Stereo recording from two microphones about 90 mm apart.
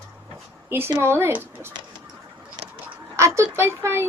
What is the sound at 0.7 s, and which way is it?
Speech, 25° right (ahead or behind).